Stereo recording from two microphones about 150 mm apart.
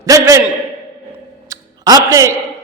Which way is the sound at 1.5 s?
25° right (ahead or behind).